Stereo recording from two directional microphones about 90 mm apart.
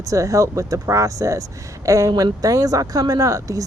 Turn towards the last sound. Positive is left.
turn(degrees=-40)  # may be behind; listen again after turning